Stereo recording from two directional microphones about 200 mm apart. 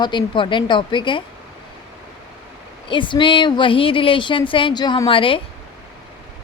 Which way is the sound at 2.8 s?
25° left (ahead or behind).